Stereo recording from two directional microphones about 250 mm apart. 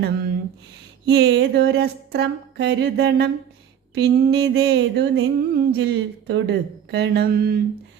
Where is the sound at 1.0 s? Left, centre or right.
Right.